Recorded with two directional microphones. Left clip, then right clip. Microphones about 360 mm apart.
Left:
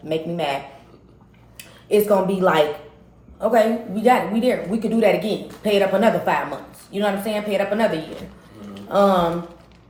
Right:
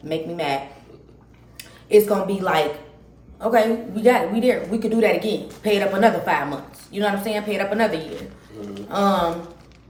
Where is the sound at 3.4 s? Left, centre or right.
Centre.